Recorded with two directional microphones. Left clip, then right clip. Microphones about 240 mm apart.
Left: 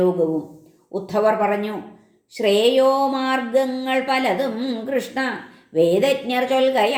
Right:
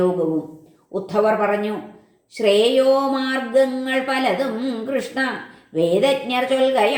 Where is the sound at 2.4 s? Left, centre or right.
Left.